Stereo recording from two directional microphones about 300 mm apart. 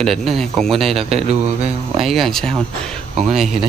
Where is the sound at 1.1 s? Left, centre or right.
Right.